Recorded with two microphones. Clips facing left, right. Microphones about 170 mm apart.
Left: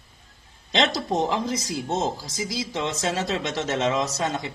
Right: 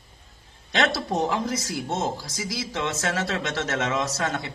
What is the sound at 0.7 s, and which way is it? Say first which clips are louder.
Speech: left 1 dB; 20° left (ahead or behind).